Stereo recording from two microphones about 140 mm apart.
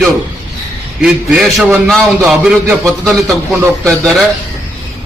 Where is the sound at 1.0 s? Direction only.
5° right (ahead or behind).